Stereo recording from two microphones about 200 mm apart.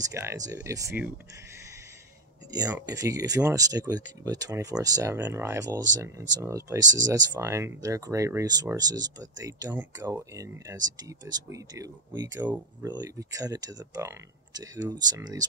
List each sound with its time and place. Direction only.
0.1 s speech: 15° right (ahead or behind)
2.5 s speech: 20° right (ahead or behind)